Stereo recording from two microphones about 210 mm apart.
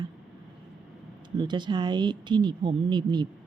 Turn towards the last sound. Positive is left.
turn(degrees=-20)  # may be behind; listen again after turning